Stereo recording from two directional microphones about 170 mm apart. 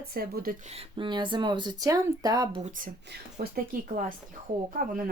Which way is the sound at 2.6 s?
45° right (ahead or behind).